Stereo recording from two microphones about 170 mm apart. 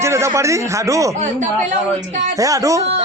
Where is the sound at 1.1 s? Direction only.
45° right (ahead or behind).